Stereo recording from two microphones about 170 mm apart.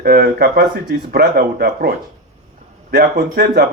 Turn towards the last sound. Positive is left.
turn(degrees=-65)  # may be behind; listen again after turning